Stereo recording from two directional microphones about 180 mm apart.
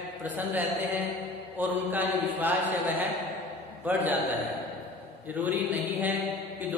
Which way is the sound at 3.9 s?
10° right (ahead or behind).